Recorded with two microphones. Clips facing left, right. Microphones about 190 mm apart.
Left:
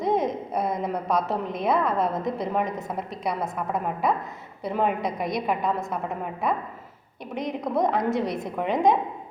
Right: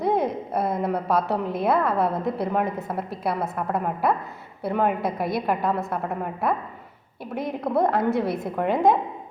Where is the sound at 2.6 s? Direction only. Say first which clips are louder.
Right 2 dB; 60° right (ahead or behind).